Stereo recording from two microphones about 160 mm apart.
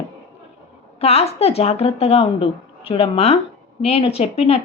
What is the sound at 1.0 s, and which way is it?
Speech, 40° left (ahead or behind).